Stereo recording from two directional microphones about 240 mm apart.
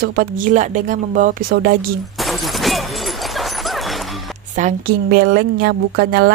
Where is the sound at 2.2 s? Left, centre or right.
Centre.